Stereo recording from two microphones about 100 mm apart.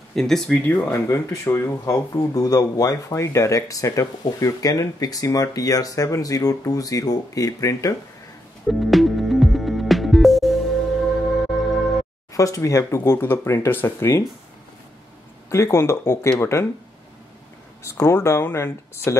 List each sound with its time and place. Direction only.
0.1 s speech: 5° left (ahead or behind)
0.6 s speech: 20° left (ahead or behind)
8.6 s music: centre (ahead or behind)
12.4 s speech: 35° left (ahead or behind)
15.5 s speech: 30° left (ahead or behind)
17.8 s speech: 25° left (ahead or behind)